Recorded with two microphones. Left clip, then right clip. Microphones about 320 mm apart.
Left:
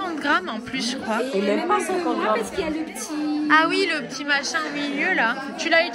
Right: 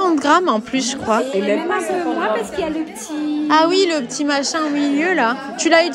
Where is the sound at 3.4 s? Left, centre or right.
Centre.